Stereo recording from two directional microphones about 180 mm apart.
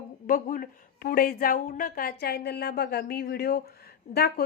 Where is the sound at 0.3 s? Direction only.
50° left (ahead or behind).